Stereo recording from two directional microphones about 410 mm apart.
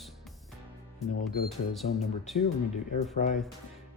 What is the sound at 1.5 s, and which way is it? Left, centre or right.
Speech, centre.